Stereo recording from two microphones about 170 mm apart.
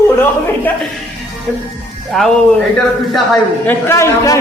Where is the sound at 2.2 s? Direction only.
5° left (ahead or behind).